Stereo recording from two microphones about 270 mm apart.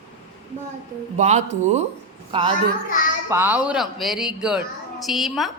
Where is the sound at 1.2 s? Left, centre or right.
Right.